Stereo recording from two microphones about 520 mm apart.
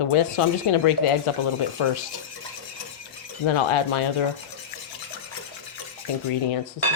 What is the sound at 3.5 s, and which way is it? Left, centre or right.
Speech, left.